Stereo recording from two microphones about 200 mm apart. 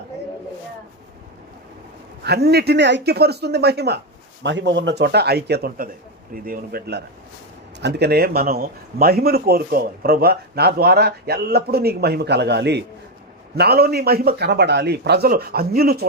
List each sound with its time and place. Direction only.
2.2 s speech: 55° right (ahead or behind)